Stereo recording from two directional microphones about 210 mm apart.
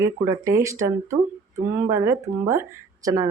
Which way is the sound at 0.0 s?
15° right (ahead or behind).